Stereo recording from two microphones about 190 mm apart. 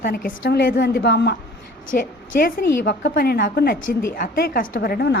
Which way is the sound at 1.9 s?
45° left (ahead or behind).